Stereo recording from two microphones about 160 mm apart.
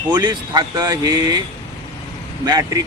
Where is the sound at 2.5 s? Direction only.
25° right (ahead or behind).